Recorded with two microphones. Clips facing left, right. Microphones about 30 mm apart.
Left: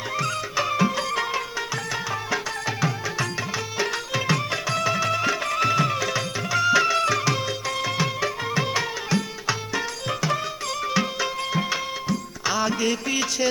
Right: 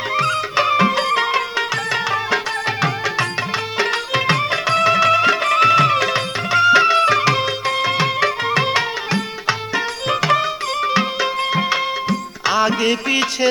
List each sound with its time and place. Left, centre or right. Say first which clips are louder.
0.2 s music: right 8 dB; right
10.1 s music: right 10 dB; right
10.8 s music: right 6 dB; right